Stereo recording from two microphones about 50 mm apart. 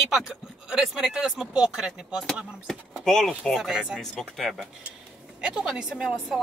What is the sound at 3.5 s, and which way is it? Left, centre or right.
Speech, centre.